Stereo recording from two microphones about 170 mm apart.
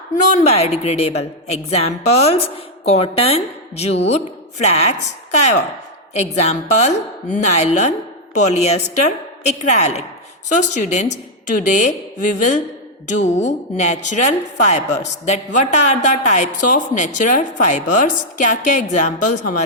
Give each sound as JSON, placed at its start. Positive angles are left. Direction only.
{"t": 0.3, "sound": "a woman's voice", "side_deg": 40}
{"t": 6.1, "sound": "a woman's voice", "side_deg": 40}